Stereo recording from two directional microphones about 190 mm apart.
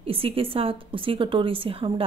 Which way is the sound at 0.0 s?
30° right (ahead or behind).